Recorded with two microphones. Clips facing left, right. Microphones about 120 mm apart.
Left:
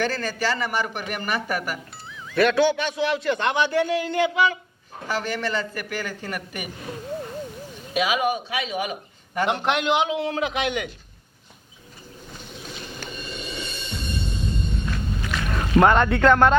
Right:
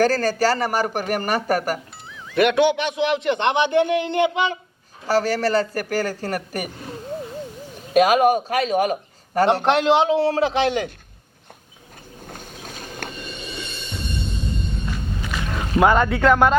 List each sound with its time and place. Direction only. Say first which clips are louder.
0.0 s a man's voice: right 7 dB; 40° right (ahead or behind)
2.3 s a man's voice: right 2 dB; 20° right (ahead or behind)
5.0 s a man's voice: right 7 dB; 40° right (ahead or behind)
7.9 s a man's voice: right 8 dB; 45° right (ahead or behind)
12.3 s vehicle: right 2 dB; 50° right (ahead or behind)
15.3 s speech: left 2 dB; 5° right (ahead or behind)